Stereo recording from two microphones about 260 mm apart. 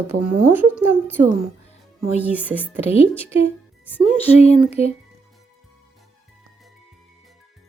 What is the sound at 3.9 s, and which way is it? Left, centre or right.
Speech, centre.